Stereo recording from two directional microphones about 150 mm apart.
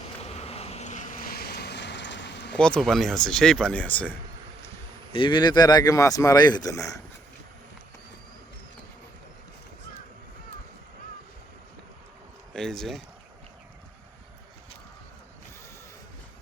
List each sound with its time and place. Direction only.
0.2 s vehicle: 45° left (ahead or behind); by 1.7 s 90° left
2.6 s speech: 5° left (ahead or behind)
5.1 s speech: 35° left (ahead or behind)
12.5 s speech: 5° left (ahead or behind)